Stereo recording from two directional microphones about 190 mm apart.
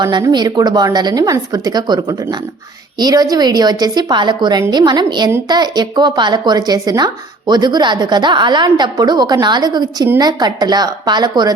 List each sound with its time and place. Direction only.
0.0 s a woman's voice: 20° right (ahead or behind)